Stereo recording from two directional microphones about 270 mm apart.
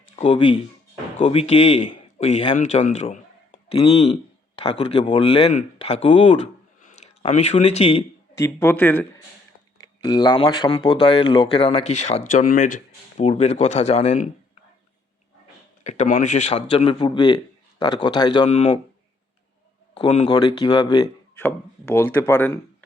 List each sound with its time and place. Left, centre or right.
0.2 s speech: left
6.8 s speech: left
8.4 s speech: centre
15.8 s speech: left
19.9 s speech: left